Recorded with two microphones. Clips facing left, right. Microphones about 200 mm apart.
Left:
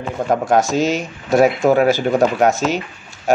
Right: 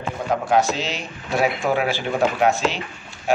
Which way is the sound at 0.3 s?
45° left (ahead or behind).